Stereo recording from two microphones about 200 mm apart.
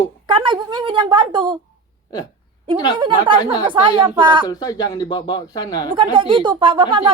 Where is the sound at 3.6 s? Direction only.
25° right (ahead or behind).